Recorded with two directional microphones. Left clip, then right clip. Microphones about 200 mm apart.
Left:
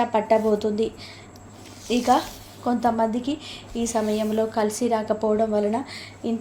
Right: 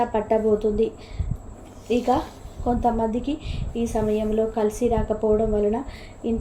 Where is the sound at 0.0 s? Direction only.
20° left (ahead or behind).